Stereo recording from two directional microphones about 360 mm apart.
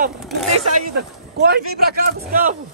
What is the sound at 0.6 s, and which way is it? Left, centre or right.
A man's voice, right.